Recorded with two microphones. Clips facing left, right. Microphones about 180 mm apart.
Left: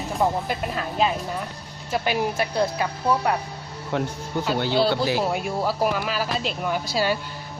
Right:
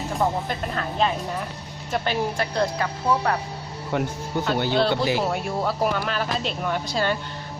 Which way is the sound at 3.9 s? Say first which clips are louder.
Right 1 dB; centre (ahead or behind).